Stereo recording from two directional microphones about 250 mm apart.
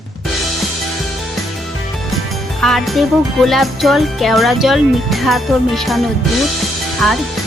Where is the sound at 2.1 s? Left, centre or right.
Centre.